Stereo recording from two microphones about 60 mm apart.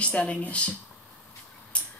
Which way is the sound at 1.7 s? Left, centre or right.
Left.